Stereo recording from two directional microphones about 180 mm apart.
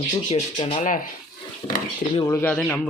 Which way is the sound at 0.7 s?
45° left (ahead or behind).